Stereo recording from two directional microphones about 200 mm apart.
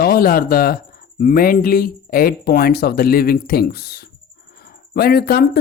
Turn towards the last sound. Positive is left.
turn(degrees=50)  # may be behind; listen again after turning